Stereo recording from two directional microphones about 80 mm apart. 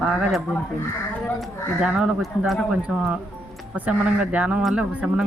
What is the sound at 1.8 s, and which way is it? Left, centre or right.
Speech, centre.